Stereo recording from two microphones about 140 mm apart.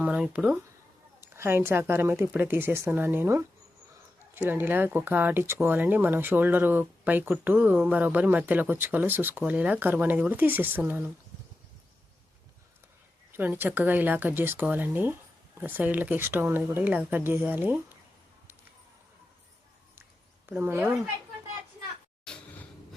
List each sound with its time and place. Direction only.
0.0 s speech: 5° right (ahead or behind)
1.3 s speech: 20° right (ahead or behind)
13.3 s speech: 15° right (ahead or behind)
20.5 s speech: 15° right (ahead or behind)
22.3 s a sound: 5° left (ahead or behind)